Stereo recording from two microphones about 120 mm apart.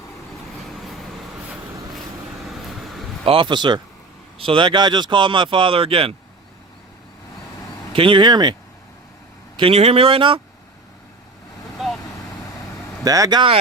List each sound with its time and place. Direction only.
0.5 s vehicle: centre (ahead or behind)
2.5 s vehicle: centre (ahead or behind)
3.2 s speech: 45° right (ahead or behind)
7.9 s speech: 45° right (ahead or behind)
9.6 s speech: 55° right (ahead or behind)
11.8 s vehicle: centre (ahead or behind)
13.1 s speech: 30° right (ahead or behind)